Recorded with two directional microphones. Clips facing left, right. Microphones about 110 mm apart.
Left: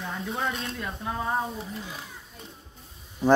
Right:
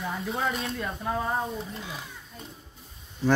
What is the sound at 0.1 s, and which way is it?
Speech, centre (ahead or behind).